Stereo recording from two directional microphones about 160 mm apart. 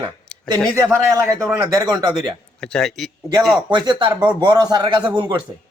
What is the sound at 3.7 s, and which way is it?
A man's voice, 30° right (ahead or behind).